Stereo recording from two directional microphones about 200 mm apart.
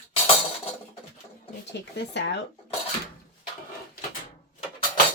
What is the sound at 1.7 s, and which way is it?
Speech, 60° left (ahead or behind).